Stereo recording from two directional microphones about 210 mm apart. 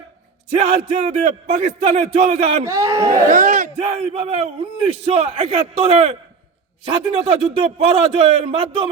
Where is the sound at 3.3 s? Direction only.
35° right (ahead or behind).